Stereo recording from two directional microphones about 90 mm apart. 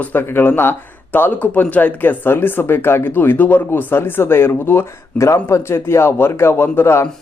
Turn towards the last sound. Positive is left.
turn(degrees=30)  # may be behind; listen again after turning